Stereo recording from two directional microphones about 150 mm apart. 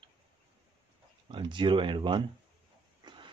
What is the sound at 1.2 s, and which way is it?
Speech, 35° right (ahead or behind).